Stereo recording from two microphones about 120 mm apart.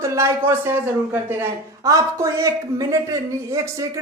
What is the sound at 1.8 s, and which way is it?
Speech, 25° right (ahead or behind).